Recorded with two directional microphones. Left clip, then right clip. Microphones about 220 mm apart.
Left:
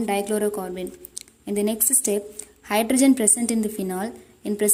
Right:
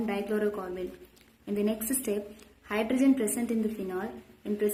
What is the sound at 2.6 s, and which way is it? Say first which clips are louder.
A woman's voice: left 7 dB; 45° left (ahead or behind).